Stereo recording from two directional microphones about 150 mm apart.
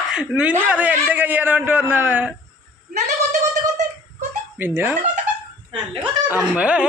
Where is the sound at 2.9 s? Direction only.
55° right (ahead or behind).